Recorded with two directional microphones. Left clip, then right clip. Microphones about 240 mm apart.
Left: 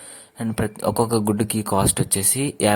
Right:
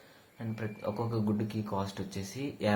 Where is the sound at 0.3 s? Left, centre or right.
Left.